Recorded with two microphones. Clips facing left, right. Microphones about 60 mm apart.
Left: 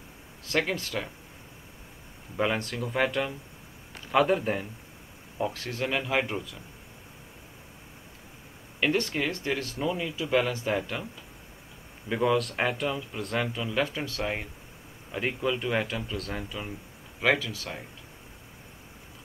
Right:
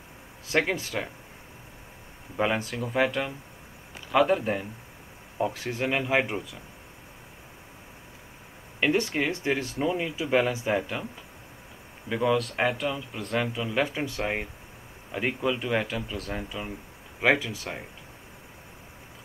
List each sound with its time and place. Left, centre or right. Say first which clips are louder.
0.5 s speech: right 2 dB; centre
2.3 s speech: right 1 dB; centre
5.4 s speech: right 2 dB; centre
8.7 s speech: right 2 dB; centre
12.1 s speech: even; centre
13.7 s speech: right 2 dB; centre
15.0 s speech: right 1 dB; centre
17.2 s speech: right 2 dB; right